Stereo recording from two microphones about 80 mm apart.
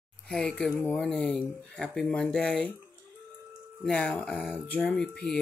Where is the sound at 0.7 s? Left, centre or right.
Left.